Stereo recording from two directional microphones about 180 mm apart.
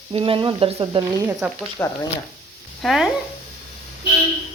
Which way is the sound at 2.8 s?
Centre (ahead or behind).